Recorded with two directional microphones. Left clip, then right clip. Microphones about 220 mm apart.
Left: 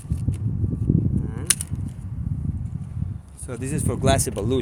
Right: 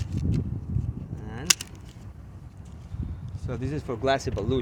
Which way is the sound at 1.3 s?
35° right (ahead or behind).